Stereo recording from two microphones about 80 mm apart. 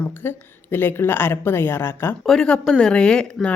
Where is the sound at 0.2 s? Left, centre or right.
Left.